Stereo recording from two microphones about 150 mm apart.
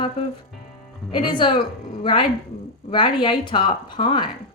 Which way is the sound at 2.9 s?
35° left (ahead or behind).